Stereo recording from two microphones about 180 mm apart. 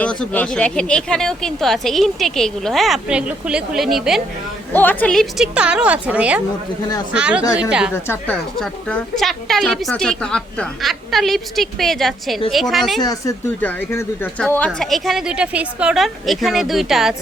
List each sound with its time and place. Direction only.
0.0 s speech: 5° left (ahead or behind)
4.7 s speech: 10° left (ahead or behind)
7.9 s a woman's voice: 15° left (ahead or behind)
8.5 s speech: centre (ahead or behind)
13.0 s speech: 20° left (ahead or behind)
13.6 s speech: 10° left (ahead or behind)